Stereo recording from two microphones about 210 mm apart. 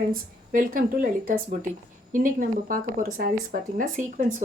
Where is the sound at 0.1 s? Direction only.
40° right (ahead or behind).